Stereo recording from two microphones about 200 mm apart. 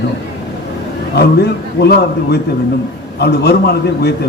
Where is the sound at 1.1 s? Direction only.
55° left (ahead or behind).